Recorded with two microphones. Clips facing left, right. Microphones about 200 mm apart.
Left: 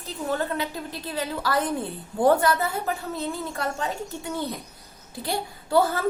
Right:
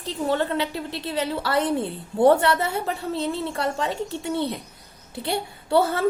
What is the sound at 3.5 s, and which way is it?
Speech, 30° right (ahead or behind).